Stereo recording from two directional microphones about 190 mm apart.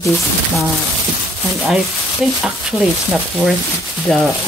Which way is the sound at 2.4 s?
5° right (ahead or behind).